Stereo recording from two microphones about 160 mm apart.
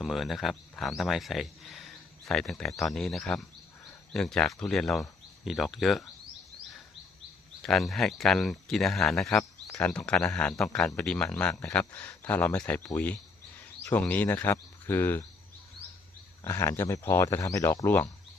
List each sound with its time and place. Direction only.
0.0 s speech: centre (ahead or behind)
7.6 s speech: centre (ahead or behind)
16.4 s speech: 15° left (ahead or behind)